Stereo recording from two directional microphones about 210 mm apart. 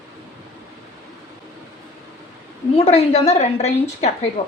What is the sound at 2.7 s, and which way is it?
A woman's voice, 30° left (ahead or behind).